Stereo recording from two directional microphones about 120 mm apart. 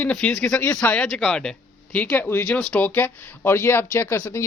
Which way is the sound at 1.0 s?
5° left (ahead or behind).